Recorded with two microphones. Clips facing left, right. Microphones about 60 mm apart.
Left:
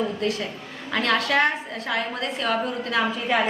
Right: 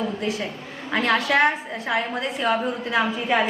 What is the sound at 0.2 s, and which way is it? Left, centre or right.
A woman's voice, centre.